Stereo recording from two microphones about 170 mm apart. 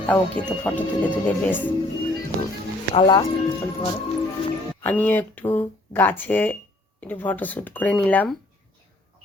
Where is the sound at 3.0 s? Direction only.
25° left (ahead or behind).